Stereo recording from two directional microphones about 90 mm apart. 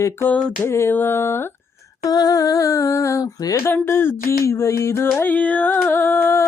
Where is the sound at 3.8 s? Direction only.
25° left (ahead or behind).